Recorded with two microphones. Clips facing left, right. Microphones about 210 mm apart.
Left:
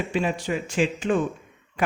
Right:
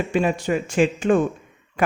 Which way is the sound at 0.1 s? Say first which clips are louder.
Right 5 dB; 50° right (ahead or behind).